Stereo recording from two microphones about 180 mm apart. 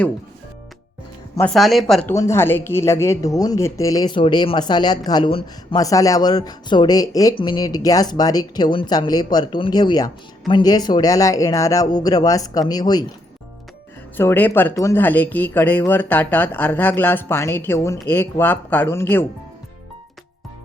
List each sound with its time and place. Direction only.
1.4 s speech: 5° left (ahead or behind)
2.1 s a woman's voice: 15° left (ahead or behind)
14.2 s speech: 10° left (ahead or behind)